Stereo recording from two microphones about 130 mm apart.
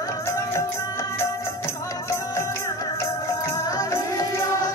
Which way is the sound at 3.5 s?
25° left (ahead or behind).